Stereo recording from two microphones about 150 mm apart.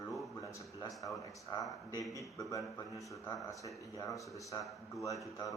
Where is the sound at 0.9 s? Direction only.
Centre (ahead or behind).